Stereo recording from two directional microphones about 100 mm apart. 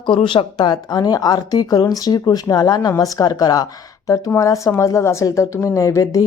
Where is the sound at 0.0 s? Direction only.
55° left (ahead or behind).